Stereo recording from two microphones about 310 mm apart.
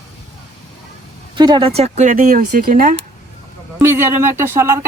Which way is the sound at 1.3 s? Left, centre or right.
Centre.